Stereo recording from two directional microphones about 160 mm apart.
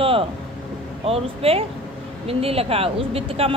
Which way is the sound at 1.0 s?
35° right (ahead or behind).